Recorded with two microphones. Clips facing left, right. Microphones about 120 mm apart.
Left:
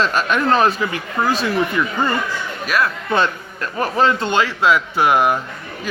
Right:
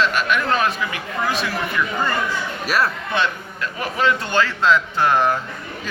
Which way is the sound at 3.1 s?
40° left (ahead or behind).